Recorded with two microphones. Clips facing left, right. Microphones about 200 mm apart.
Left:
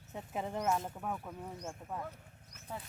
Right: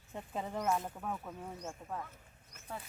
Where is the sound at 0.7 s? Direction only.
5° left (ahead or behind).